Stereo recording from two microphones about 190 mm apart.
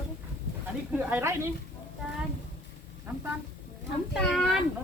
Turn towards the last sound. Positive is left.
turn(degrees=0)  # may be behind; listen again after turning